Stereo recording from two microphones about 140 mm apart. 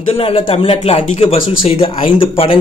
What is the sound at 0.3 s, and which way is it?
A man's voice, 40° left (ahead or behind).